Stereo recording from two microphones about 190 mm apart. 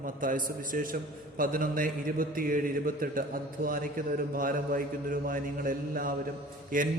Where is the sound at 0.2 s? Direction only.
45° right (ahead or behind).